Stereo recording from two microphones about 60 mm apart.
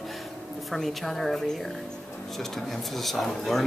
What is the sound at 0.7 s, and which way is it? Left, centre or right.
Speech, centre.